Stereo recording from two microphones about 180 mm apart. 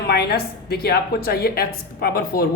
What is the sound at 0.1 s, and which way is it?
Speech, 60° left (ahead or behind).